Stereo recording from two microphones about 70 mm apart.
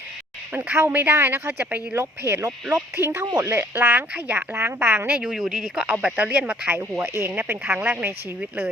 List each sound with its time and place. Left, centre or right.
0.5 s speech: right
3.8 s speech: right
5.2 s speech: centre
7.0 s speech: right